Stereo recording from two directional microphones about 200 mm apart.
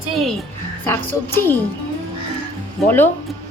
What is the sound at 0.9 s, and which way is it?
Speech, 10° left (ahead or behind).